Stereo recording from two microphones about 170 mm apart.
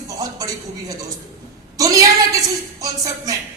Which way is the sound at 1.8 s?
20° right (ahead or behind).